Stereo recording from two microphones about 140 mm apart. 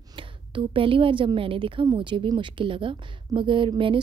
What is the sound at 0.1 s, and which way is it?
A woman's voice, 35° right (ahead or behind).